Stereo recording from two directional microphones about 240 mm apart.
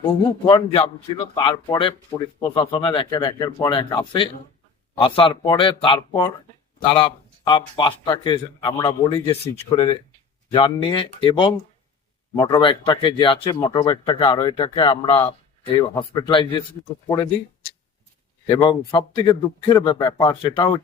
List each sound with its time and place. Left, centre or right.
0.0 s speech: centre
4.9 s speech: left
18.4 s speech: centre